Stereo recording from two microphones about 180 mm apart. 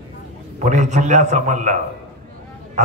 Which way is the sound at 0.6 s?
40° right (ahead or behind).